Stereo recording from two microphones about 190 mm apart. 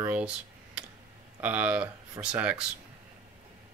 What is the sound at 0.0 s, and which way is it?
Computer keyboard, 10° right (ahead or behind).